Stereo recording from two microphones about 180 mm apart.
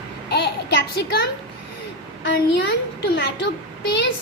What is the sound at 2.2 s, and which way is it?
A woman's voice, 75° left (ahead or behind).